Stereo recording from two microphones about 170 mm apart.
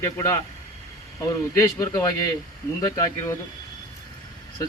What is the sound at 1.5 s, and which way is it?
A man's voice, 15° left (ahead or behind).